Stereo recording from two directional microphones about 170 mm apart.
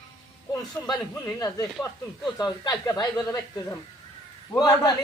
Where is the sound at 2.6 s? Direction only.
25° left (ahead or behind).